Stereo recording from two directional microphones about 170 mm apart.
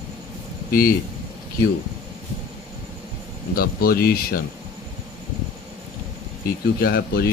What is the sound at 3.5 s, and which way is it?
Speech, 60° left (ahead or behind).